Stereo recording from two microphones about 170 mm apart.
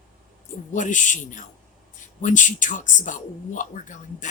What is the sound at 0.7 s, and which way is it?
Speech, 45° left (ahead or behind).